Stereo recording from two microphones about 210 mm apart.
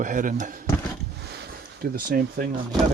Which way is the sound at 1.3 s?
45° right (ahead or behind).